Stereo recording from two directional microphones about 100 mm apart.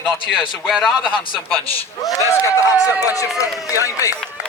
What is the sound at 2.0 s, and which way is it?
A man's voice, 30° left (ahead or behind).